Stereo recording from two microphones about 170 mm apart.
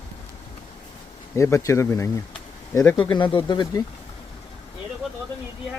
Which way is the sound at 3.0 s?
30° left (ahead or behind).